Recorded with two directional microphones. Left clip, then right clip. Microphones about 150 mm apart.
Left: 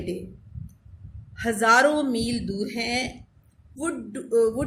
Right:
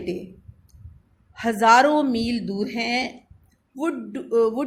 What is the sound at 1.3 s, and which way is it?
Speech, 50° right (ahead or behind).